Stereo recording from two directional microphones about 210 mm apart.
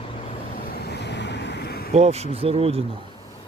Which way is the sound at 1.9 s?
30° right (ahead or behind).